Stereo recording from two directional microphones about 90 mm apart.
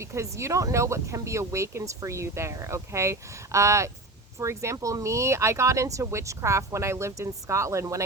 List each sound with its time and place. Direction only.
0.0 s speech: 30° right (ahead or behind)